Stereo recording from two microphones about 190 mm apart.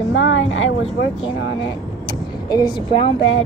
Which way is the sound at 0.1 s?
90° left.